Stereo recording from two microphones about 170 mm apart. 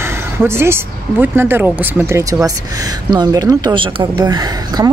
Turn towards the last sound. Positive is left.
turn(degrees=-25)  # may be behind; listen again after turning